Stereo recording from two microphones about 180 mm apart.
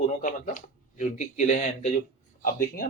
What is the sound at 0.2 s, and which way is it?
Speech, 45° left (ahead or behind).